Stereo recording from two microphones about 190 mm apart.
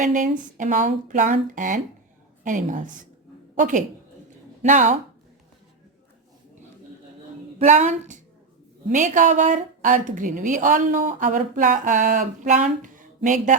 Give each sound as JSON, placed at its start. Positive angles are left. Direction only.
{"t": 0.0, "sound": "a woman's voice", "side_deg": -40}
{"t": 7.6, "sound": "a woman's voice", "side_deg": -40}